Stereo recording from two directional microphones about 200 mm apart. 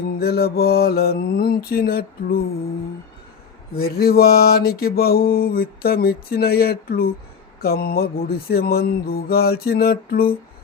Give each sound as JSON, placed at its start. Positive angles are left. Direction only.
{"t": 0.1, "sound": "mantra", "side_deg": 50}
{"t": 3.8, "sound": "mantra", "side_deg": 50}